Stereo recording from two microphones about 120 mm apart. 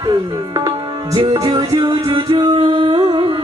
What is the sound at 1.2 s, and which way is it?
Music, 45° right (ahead or behind).